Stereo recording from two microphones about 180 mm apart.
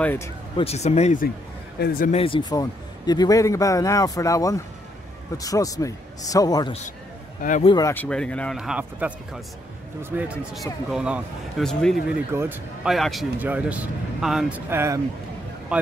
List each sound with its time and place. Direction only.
0.0 s speech: 10° left (ahead or behind)
0.6 s speech: 35° left (ahead or behind)
1.8 s speech: 55° left (ahead or behind)
2.0 s a man's voice: 30° left (ahead or behind)
7.9 s speech: 5° left (ahead or behind)
8.5 s speech: 5° right (ahead or behind)
12.3 s speech: 10° right (ahead or behind)
12.9 s speech: centre (ahead or behind)